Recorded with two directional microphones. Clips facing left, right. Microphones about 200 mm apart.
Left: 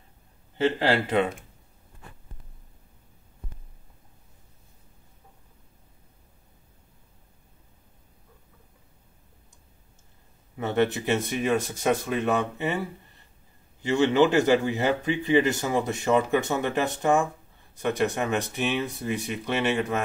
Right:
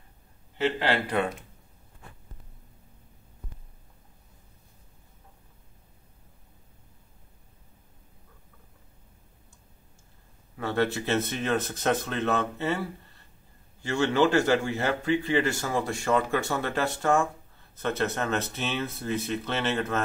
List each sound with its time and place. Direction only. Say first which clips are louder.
0.9 s a man's voice: left 3 dB; 25° left (ahead or behind)
10.6 s a man's voice: left 3 dB; 20° left (ahead or behind)